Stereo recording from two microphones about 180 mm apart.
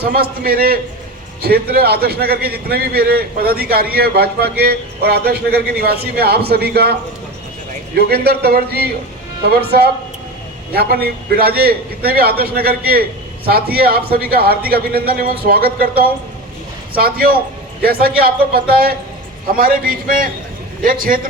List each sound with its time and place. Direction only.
0.0 s a man's voice: 55° right (ahead or behind)
7.9 s a man's voice: 60° right (ahead or behind)